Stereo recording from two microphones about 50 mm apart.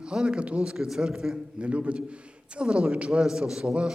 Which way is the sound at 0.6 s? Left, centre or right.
Centre.